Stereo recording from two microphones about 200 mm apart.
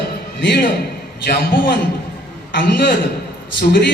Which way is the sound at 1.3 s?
50° left (ahead or behind).